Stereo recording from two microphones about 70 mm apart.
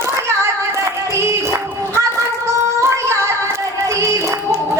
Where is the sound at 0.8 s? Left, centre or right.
Right.